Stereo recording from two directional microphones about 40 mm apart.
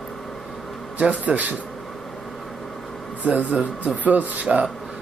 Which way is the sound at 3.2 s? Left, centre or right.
Right.